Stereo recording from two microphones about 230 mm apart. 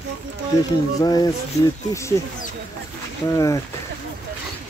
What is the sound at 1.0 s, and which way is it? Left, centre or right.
Speech, centre.